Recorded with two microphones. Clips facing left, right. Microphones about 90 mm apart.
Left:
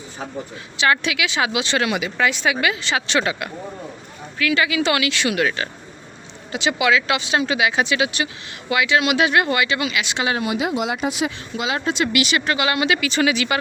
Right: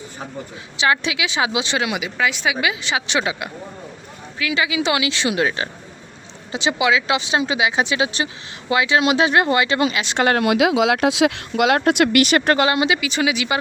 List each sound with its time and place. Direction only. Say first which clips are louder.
0.8 s speech: even; 20° right (ahead or behind); by 10.2 s 35° right (ahead or behind)
10.2 s speech: right 8 dB; 65° right (ahead or behind); by 12.6 s 45° right (ahead or behind)
12.6 s speech: right 2 dB; 25° right (ahead or behind)
13.0 s speech: left 1 dB; 10° right (ahead or behind)